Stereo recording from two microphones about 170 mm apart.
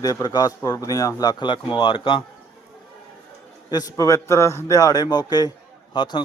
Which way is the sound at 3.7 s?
20° left (ahead or behind).